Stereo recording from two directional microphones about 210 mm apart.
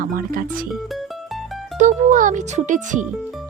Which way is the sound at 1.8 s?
35° right (ahead or behind).